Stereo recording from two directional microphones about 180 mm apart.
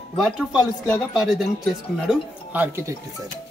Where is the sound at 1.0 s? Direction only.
Centre (ahead or behind).